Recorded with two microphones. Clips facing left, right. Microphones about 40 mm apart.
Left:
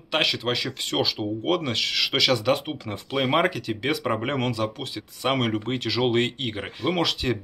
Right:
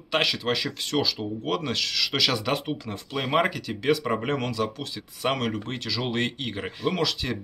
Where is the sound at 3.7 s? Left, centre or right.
Centre.